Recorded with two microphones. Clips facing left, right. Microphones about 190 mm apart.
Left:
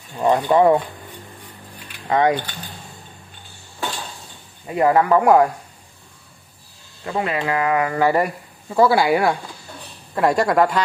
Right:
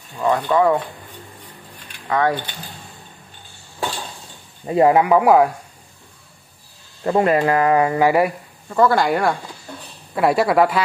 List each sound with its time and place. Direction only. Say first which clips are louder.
0.2 s speech: left 2 dB; 25° left (ahead or behind)
2.0 s mechanisms: left 2 dB; 20° left (ahead or behind)
4.6 s speech: right 3 dB; 25° right (ahead or behind)
4.9 s speech: right 1 dB; 10° right (ahead or behind)
7.1 s speech: right 6 dB; 45° right (ahead or behind)
7.9 s speech: right 2 dB; 15° right (ahead or behind)
8.6 s speech: left 1 dB; 10° left (ahead or behind)